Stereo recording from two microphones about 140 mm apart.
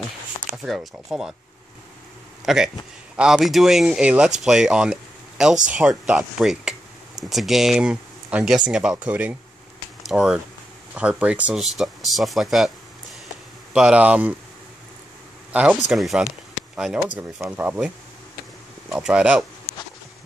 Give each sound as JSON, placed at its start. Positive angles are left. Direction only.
{"t": 0.3, "sound": "a sound", "side_deg": 35}
{"t": 0.7, "sound": "speech", "side_deg": -5}
{"t": 2.4, "sound": "speech", "side_deg": -5}
{"t": 13.7, "sound": "speech", "side_deg": -10}
{"t": 15.5, "sound": "speech", "side_deg": -10}